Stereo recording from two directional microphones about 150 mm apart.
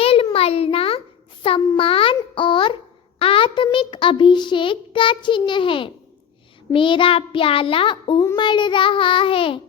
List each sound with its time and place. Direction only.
0.0 s a sound: 40° left (ahead or behind)
0.3 s a child's voice: 40° left (ahead or behind)
3.2 s child singing: 40° left (ahead or behind)